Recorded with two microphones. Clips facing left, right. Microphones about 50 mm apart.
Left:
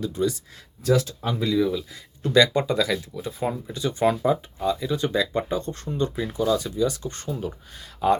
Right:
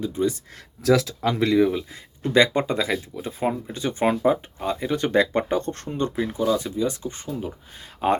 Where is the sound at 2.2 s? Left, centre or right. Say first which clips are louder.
Even; right.